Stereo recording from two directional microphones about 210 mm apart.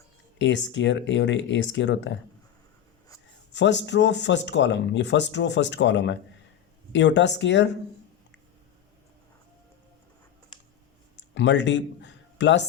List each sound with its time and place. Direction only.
0.3 s speech: 60° left (ahead or behind)
3.5 s speech: 60° left (ahead or behind)
11.3 s a man's voice: 60° left (ahead or behind)